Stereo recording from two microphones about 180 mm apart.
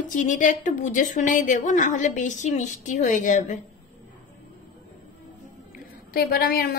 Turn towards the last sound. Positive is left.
turn(degrees=55)  # may be behind; listen again after turning